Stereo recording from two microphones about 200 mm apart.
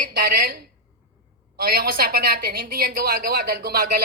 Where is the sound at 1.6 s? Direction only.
50° right (ahead or behind).